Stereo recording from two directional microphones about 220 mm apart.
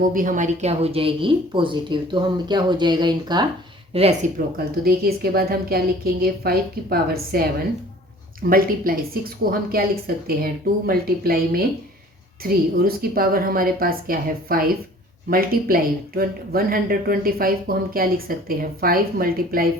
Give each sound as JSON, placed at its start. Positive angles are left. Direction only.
{"t": 0.1, "sound": "speech", "side_deg": -40}
{"t": 4.5, "sound": "a woman's voice", "side_deg": -45}